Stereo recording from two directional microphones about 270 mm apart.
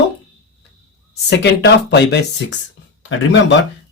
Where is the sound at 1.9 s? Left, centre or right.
Left.